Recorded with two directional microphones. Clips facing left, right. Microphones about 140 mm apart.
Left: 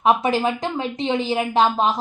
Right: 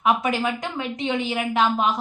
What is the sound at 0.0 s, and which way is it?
Speech, 30° left (ahead or behind).